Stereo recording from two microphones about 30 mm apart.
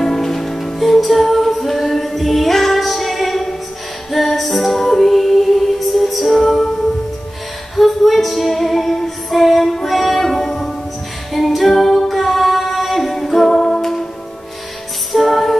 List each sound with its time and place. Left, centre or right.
0.0 s music: centre
6.4 s music: centre
7.7 s music: centre
11.3 s a capella: centre
15.1 s music: centre